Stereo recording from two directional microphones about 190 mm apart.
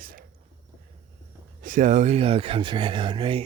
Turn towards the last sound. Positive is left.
turn(degrees=-25)  # may be behind; listen again after turning